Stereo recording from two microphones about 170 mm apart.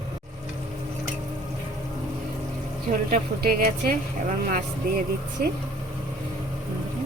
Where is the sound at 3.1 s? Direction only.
55° right (ahead or behind).